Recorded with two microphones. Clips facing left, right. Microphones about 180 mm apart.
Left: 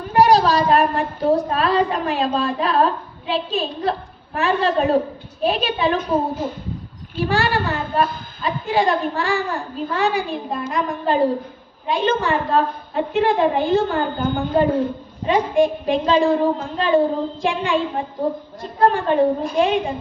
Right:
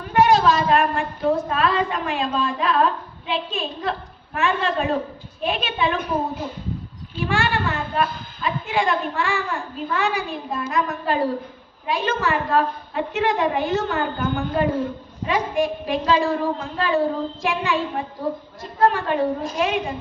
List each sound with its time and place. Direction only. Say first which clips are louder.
0.1 s a woman's voice: left 2 dB; 35° left (ahead or behind)
7.3 s a woman's voice: left 2 dB; 35° left (ahead or behind)